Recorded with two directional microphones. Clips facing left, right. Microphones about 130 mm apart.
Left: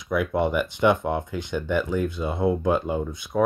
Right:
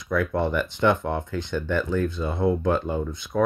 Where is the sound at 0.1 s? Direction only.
15° left (ahead or behind).